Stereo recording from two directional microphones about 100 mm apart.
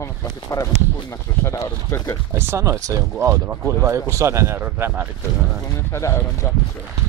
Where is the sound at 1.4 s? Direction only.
30° left (ahead or behind).